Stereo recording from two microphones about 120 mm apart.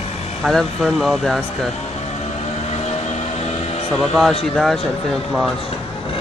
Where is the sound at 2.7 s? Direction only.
60° left (ahead or behind).